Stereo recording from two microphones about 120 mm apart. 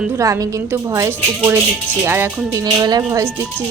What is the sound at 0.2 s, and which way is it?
Speech, 30° right (ahead or behind).